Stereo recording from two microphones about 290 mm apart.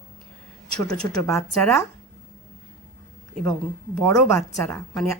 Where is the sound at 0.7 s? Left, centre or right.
Right.